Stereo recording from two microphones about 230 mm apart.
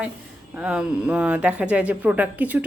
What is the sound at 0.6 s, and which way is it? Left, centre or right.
Speech, centre.